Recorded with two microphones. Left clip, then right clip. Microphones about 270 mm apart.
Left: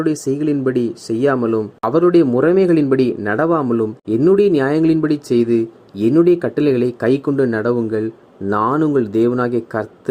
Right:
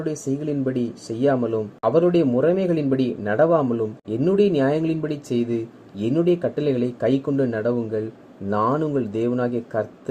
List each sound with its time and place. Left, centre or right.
0.0 s a man's voice: left